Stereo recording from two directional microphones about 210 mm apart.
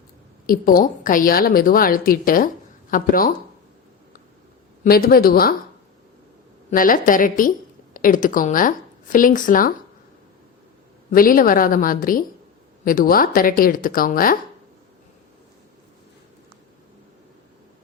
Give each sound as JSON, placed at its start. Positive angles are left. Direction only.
{"t": 0.4, "sound": "a woman's voice", "side_deg": 45}
{"t": 4.8, "sound": "a woman's voice", "side_deg": 45}
{"t": 6.7, "sound": "a woman's voice", "side_deg": 40}
{"t": 11.1, "sound": "a woman's voice", "side_deg": 40}